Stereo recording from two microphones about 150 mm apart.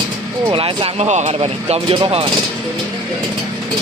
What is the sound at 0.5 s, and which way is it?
Speech, 35° right (ahead or behind).